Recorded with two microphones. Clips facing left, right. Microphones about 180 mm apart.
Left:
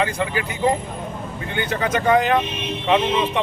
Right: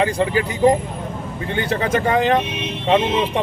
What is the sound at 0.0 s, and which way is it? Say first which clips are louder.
Speech: right 4 dB; 30° right (ahead or behind).